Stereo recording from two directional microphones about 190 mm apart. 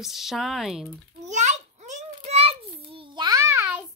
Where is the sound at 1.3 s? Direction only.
40° right (ahead or behind).